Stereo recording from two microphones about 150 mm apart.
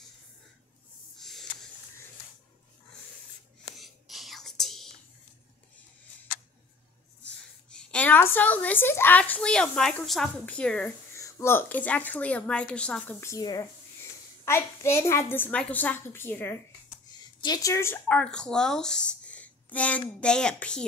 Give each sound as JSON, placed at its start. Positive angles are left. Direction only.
{"t": 1.1, "sound": "a sound", "side_deg": 0}
{"t": 3.7, "sound": "whispering", "side_deg": 0}
{"t": 7.7, "sound": "a woman's voice", "side_deg": 10}
{"t": 11.1, "sound": "a woman's voice", "side_deg": 20}
{"t": 13.2, "sound": "a woman's voice", "side_deg": 25}
{"t": 17.4, "sound": "speech", "side_deg": 25}
{"t": 18.0, "sound": "a woman's voice", "side_deg": 5}